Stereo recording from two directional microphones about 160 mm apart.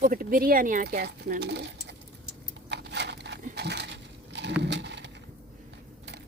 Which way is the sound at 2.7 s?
90° right.